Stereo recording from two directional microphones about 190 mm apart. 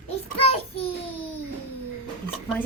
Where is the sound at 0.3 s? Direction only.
30° left (ahead or behind).